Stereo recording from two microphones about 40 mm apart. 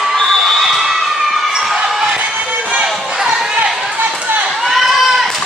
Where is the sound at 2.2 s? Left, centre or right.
Right.